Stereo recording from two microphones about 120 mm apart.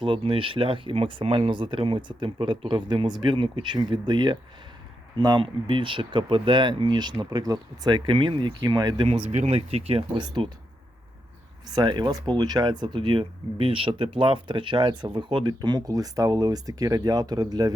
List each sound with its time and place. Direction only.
0.0 s speech: 45° right (ahead or behind)
9.3 s speech: 75° right (ahead or behind); by 10.0 s 55° right (ahead or behind)
10.2 s speech: 40° right (ahead or behind)
11.7 s speech: 35° right (ahead or behind)